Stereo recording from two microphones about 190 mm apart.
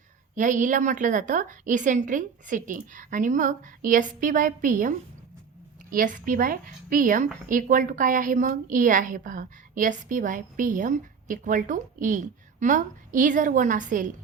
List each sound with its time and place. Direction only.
0.3 s a woman's voice: 40° right (ahead or behind)